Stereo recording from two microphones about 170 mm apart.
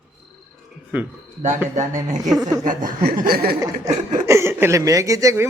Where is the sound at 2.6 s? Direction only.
55° right (ahead or behind).